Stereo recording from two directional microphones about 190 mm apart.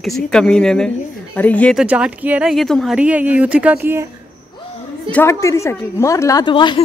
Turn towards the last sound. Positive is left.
turn(degrees=25)  # may be behind; listen again after turning